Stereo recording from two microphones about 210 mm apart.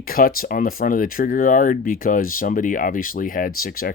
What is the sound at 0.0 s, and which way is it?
Speech, 45° left (ahead or behind).